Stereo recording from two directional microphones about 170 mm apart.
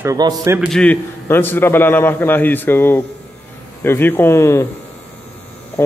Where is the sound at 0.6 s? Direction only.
5° left (ahead or behind).